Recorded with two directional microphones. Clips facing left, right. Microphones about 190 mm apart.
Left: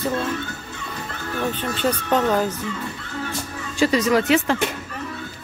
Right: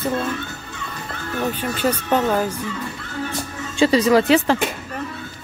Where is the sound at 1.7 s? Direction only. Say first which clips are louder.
Right 1 dB; 10° right (ahead or behind).